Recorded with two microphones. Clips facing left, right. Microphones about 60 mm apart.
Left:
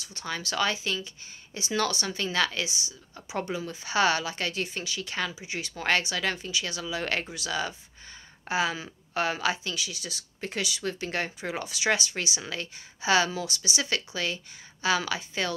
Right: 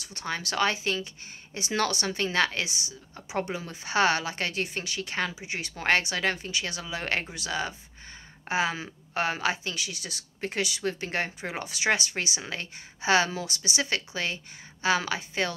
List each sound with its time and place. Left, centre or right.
0.1 s speech: right